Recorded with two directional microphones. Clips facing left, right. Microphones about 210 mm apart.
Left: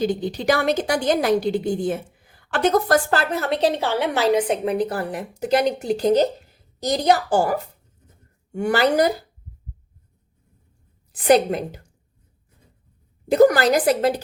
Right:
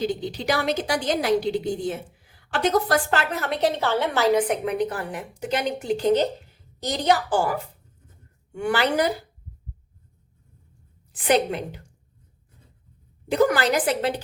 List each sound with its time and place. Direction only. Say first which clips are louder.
0.0 s a woman's voice: left 4 dB; 50° left (ahead or behind)
8.5 s a woman's voice: left 4 dB; 40° left (ahead or behind)
11.1 s a woman's voice: left 5 dB; 40° left (ahead or behind)
13.2 s a woman's voice: left 5 dB; 40° left (ahead or behind)